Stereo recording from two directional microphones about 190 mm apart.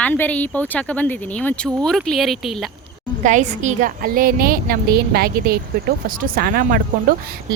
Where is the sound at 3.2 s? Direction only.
40° right (ahead or behind).